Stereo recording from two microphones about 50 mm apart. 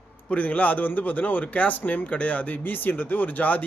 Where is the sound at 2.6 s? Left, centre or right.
Left.